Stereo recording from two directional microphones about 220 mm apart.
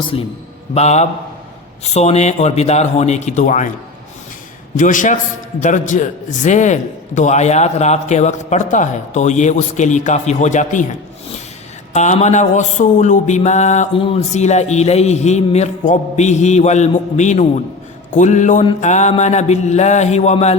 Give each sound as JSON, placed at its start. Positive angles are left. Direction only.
{"t": 0.1, "sound": "a man's voice", "side_deg": 25}
{"t": 1.8, "sound": "mantra", "side_deg": 30}
{"t": 4.8, "sound": "mantra", "side_deg": 35}
{"t": 11.9, "sound": "mantra", "side_deg": 30}